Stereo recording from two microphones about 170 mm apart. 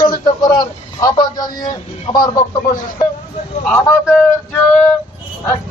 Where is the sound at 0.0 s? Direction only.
25° left (ahead or behind).